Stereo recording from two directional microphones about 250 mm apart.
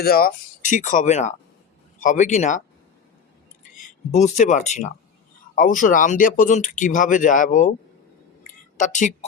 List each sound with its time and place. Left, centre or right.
0.0 s speech: left
4.1 s speech: left
8.8 s speech: left